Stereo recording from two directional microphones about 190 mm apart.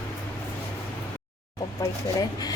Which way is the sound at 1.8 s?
15° left (ahead or behind).